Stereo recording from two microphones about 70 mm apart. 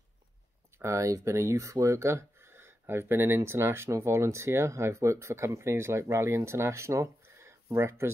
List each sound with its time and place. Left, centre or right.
0.7 s speech: right